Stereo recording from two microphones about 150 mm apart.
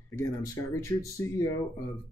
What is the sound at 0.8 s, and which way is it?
Speech, 20° left (ahead or behind).